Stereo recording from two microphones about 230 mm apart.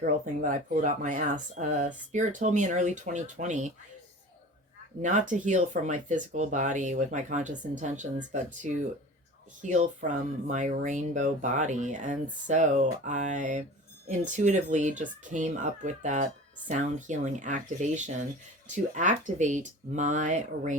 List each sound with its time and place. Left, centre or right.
0.0 s speech: right
5.0 s speech: right